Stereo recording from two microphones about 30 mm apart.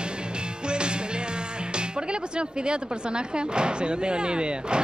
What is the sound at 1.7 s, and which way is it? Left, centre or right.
Speech, right.